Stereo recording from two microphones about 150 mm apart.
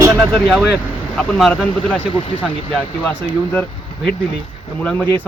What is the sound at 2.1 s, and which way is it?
Speech, 35° left (ahead or behind).